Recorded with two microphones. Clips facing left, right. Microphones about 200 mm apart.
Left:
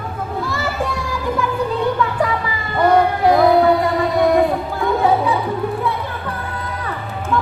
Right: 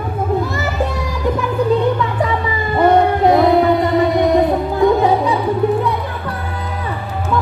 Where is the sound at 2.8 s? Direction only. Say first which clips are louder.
Right 2 dB; 25° right (ahead or behind).